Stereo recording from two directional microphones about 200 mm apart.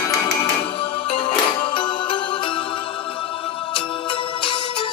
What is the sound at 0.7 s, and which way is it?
Music, 30° left (ahead or behind).